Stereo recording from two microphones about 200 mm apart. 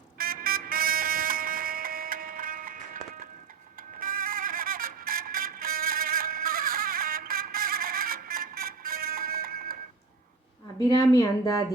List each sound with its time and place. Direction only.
0.2 s vehicle: 45° right (ahead or behind)
4.0 s music: 45° right (ahead or behind)
10.8 s speech: 15° left (ahead or behind)